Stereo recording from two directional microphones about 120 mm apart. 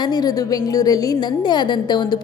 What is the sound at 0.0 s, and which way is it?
Speech, 35° left (ahead or behind).